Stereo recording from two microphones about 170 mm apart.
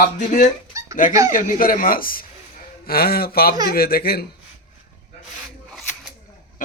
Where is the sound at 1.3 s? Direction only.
50° left (ahead or behind).